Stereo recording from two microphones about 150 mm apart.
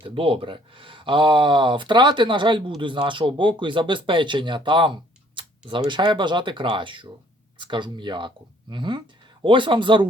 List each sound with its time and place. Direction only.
0.0 s speech: 35° right (ahead or behind)